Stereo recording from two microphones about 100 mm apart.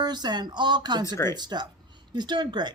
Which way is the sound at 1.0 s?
30° left (ahead or behind).